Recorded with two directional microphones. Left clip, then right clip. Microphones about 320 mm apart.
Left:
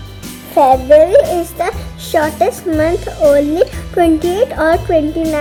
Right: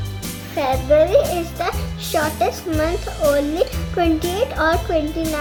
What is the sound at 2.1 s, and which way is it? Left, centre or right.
Speech, left.